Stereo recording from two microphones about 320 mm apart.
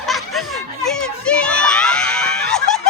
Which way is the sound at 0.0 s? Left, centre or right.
Centre.